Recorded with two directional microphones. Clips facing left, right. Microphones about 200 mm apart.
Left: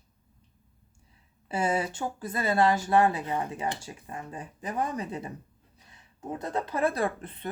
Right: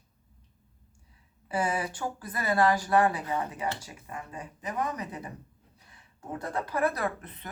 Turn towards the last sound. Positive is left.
turn(degrees=30)  # may be behind; listen again after turning